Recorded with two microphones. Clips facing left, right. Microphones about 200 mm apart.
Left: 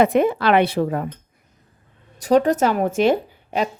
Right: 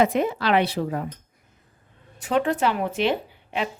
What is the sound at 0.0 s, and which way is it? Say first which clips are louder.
Speech: left 5 dB; 55° left (ahead or behind).